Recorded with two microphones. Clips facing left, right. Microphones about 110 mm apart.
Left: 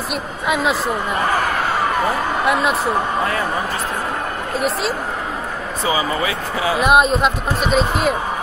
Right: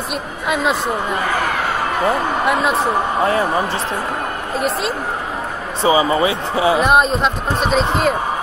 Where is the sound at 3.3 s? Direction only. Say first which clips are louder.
Right 4 dB; 25° right (ahead or behind).